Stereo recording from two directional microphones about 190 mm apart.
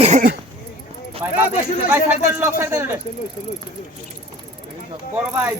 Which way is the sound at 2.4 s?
15° right (ahead or behind).